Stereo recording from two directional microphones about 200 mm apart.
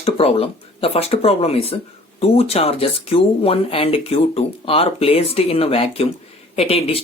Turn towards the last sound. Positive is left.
turn(degrees=30)  # may be behind; listen again after turning